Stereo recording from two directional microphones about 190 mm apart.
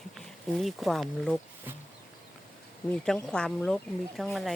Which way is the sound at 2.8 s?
5° left (ahead or behind).